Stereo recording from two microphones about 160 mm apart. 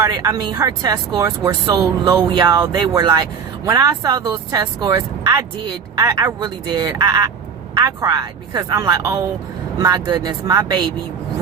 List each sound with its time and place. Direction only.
0.0 s speech: 20° right (ahead or behind)